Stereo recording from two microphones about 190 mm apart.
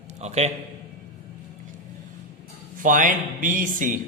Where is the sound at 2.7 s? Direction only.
45° right (ahead or behind).